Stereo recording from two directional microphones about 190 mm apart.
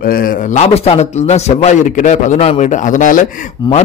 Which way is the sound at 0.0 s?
50° left (ahead or behind).